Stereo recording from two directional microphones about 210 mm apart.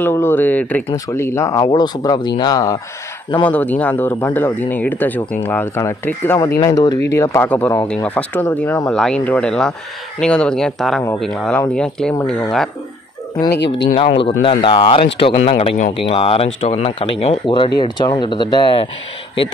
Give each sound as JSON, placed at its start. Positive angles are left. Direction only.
{"t": 0.0, "sound": "speech", "side_deg": 10}
{"t": 14.1, "sound": "speech", "side_deg": 25}